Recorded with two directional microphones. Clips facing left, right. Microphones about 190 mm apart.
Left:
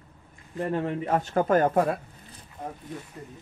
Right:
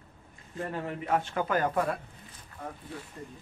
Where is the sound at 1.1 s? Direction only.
45° left (ahead or behind).